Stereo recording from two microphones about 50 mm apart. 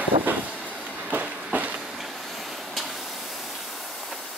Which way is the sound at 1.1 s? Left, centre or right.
Right.